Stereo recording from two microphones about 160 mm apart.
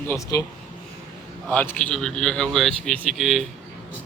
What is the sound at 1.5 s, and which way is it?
A man's voice, 10° left (ahead or behind).